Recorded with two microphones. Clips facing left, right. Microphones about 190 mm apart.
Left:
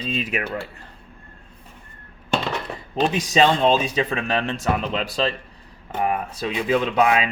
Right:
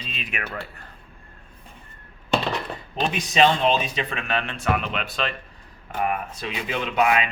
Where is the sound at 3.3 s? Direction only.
35° left (ahead or behind).